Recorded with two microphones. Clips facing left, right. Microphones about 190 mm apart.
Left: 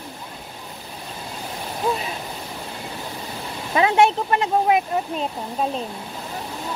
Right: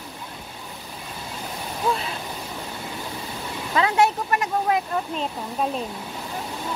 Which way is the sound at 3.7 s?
25° left (ahead or behind).